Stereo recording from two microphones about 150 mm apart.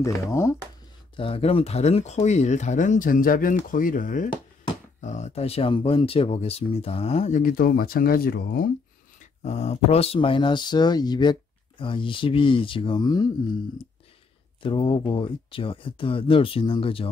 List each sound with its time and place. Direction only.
0.0 s speech: 20° left (ahead or behind)
1.1 s speech: 40° left (ahead or behind); by 4.3 s 60° left (ahead or behind)
5.0 s speech: 50° left (ahead or behind); by 8.6 s 85° left
9.2 s speech: 50° left (ahead or behind); by 13.3 s 30° left (ahead or behind)
14.6 s speech: 35° left (ahead or behind)